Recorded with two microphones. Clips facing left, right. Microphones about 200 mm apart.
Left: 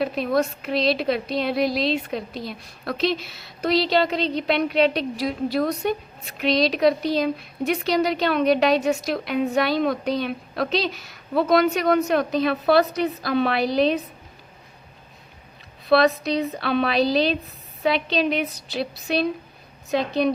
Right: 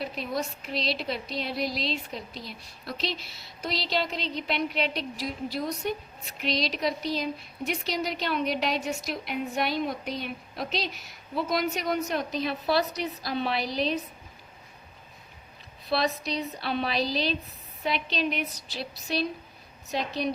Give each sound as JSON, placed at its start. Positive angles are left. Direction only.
{"t": 0.0, "sound": "a woman's voice", "side_deg": 60}
{"t": 15.9, "sound": "a woman's voice", "side_deg": 60}